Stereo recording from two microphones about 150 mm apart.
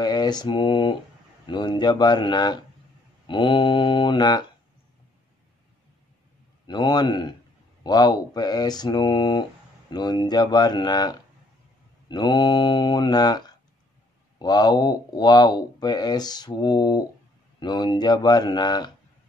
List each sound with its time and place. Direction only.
0.0 s mantra: 30° left (ahead or behind)
1.4 s speech: 30° left (ahead or behind)
6.7 s speech: 30° left (ahead or behind)
14.4 s speech: 25° left (ahead or behind)